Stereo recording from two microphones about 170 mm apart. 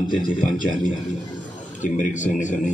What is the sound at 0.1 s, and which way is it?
A man's voice, 50° left (ahead or behind).